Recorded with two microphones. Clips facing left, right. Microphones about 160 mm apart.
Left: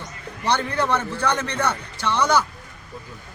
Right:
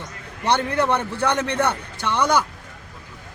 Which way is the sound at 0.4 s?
60° right (ahead or behind).